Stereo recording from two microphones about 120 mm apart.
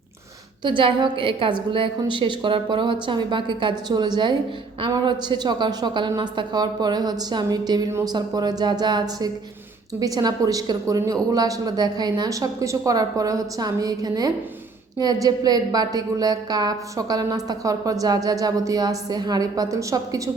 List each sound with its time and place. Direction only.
0.6 s a woman's voice: 45° right (ahead or behind); by 20.3 s 25° right (ahead or behind)